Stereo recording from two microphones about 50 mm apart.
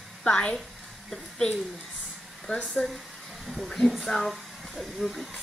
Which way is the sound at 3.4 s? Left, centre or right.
Centre.